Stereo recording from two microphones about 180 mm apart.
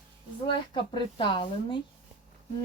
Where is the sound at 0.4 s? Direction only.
25° left (ahead or behind).